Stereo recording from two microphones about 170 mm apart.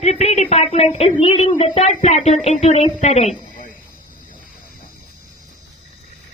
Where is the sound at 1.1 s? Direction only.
30° left (ahead or behind).